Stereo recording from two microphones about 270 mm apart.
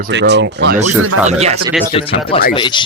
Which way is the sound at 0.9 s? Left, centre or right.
Right.